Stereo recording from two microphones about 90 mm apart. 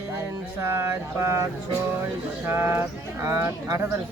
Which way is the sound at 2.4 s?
25° right (ahead or behind).